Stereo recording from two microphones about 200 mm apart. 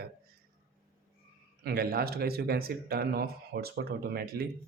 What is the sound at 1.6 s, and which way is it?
Speech, 50° right (ahead or behind).